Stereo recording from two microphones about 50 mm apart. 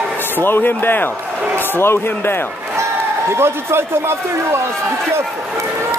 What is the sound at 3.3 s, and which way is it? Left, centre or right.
Speech, right.